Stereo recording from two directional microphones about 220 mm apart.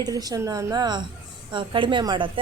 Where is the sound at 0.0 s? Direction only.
15° right (ahead or behind).